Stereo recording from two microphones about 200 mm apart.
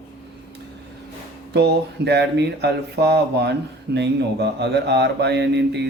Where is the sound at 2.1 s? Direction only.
55° right (ahead or behind).